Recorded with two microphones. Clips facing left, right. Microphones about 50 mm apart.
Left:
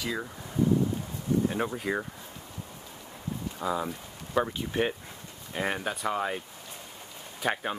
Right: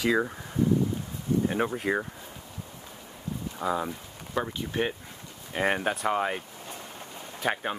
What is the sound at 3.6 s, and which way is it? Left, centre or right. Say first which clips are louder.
Speech: right 2 dB; centre.